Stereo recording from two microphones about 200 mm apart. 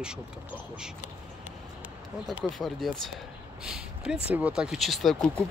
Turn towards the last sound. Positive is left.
turn(degrees=0)  # may be behind; listen again after turning